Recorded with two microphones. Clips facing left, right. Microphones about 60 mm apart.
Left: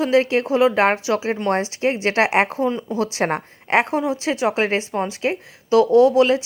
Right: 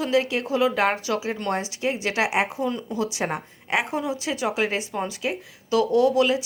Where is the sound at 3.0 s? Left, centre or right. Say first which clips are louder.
Left 5 dB; left.